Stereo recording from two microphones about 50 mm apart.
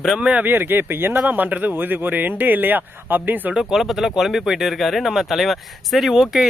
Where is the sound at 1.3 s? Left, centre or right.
Right.